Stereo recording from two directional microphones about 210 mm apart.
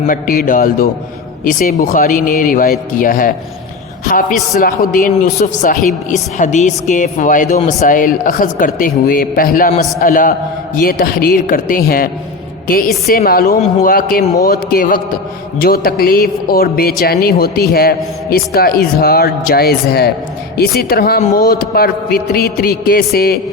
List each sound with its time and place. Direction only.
0.1 s a woman's voice: 40° left (ahead or behind)